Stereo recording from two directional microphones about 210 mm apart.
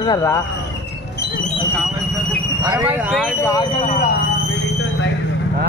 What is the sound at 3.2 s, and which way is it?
Speech, 15° left (ahead or behind).